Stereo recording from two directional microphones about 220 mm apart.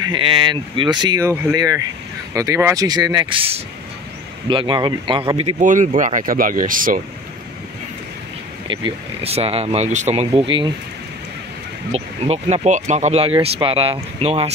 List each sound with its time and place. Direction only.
0.1 s speech: 20° right (ahead or behind); by 7.0 s 40° right (ahead or behind)
8.6 s speech: 25° right (ahead or behind)
11.9 s speech: 30° right (ahead or behind)